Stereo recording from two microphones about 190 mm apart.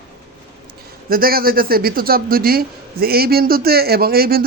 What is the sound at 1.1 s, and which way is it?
A man's voice, 50° right (ahead or behind).